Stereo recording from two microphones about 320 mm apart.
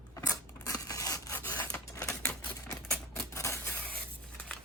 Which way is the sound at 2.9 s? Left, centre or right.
Centre.